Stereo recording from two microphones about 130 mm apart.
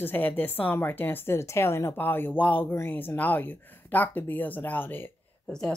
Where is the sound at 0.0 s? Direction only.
15° left (ahead or behind).